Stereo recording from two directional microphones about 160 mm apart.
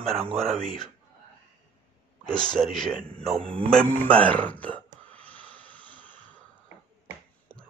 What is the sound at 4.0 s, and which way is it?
Speech, 10° left (ahead or behind).